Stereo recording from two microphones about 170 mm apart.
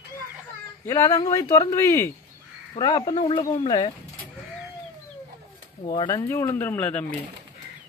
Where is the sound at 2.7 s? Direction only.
25° left (ahead or behind).